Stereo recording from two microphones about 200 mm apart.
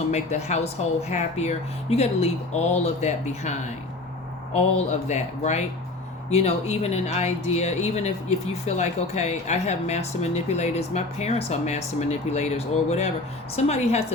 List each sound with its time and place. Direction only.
0.1 s speech: 35° left (ahead or behind)
4.9 s speech: 35° left (ahead or behind)